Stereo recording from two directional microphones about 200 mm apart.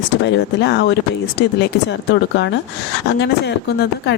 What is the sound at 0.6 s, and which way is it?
Speech, 60° left (ahead or behind).